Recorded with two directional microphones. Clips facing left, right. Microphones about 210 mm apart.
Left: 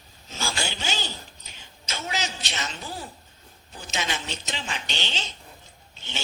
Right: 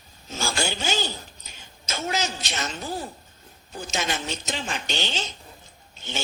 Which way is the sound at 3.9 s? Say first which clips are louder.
Right 2 dB; 45° right (ahead or behind).